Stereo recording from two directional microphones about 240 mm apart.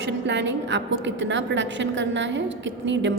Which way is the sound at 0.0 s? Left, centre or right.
Right.